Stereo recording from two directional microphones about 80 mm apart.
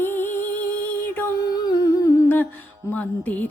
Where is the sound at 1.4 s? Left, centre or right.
Left.